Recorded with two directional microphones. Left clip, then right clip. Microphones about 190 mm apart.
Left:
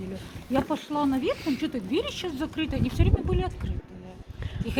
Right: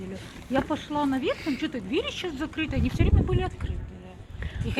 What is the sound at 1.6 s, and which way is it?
Speech, 65° left (ahead or behind).